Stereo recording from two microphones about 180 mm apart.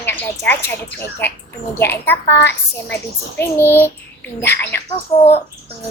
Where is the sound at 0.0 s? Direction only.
10° left (ahead or behind).